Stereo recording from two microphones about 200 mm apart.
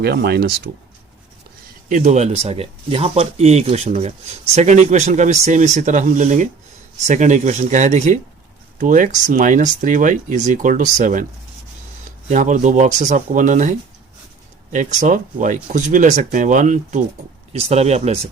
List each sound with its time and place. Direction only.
0.0 s speech: 50° right (ahead or behind)
1.9 s speech: 35° right (ahead or behind)
12.3 s speech: 40° right (ahead or behind)